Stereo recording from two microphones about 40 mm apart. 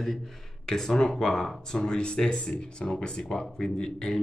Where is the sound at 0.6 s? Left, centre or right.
Centre.